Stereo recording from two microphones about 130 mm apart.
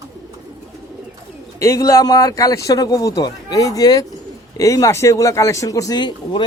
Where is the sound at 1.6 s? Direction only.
25° left (ahead or behind).